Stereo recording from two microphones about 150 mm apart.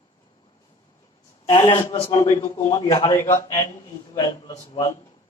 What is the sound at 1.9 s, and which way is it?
Speech, 35° left (ahead or behind).